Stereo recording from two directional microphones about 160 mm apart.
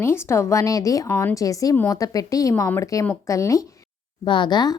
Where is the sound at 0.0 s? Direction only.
15° left (ahead or behind).